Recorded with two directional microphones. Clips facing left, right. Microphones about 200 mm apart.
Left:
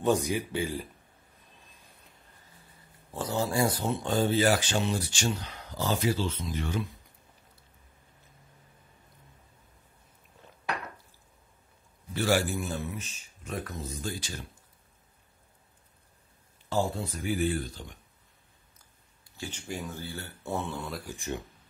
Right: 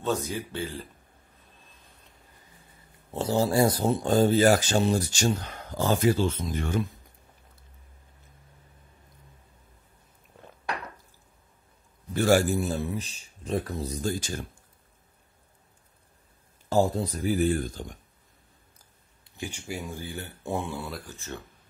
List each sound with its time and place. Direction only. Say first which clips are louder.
0.0 s speech: left 3 dB; 15° left (ahead or behind)
3.1 s speech: right 5 dB; 30° right (ahead or behind); by 6.9 s 50° right (ahead or behind)
12.1 s a man's voice: right 5 dB; 45° right (ahead or behind)
16.6 s speech: right 6 dB; 40° right (ahead or behind)
19.3 s speech: right 2 dB; 15° right (ahead or behind)
21.0 s speech: left 4 dB; 15° left (ahead or behind)